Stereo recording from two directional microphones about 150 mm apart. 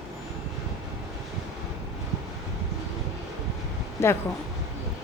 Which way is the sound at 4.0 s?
15° left (ahead or behind).